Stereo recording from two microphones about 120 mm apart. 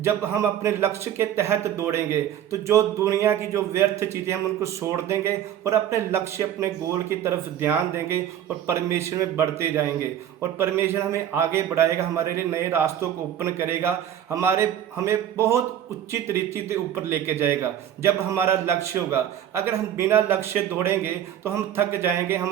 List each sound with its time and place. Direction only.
0.0 s a man's voice: 20° right (ahead or behind)